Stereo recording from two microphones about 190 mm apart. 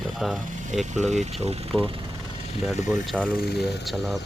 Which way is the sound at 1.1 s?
35° right (ahead or behind).